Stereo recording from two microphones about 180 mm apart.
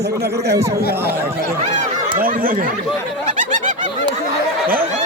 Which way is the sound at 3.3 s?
45° right (ahead or behind).